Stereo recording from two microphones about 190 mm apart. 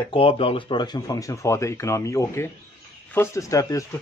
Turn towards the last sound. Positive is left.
turn(degrees=20)  # may be behind; listen again after turning